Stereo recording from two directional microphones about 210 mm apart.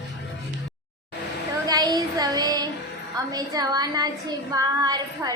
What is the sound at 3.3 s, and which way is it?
A woman's voice, 20° right (ahead or behind).